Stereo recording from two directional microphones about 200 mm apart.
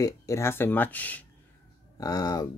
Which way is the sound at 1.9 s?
20° left (ahead or behind).